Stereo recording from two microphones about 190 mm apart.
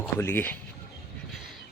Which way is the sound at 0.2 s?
10° left (ahead or behind).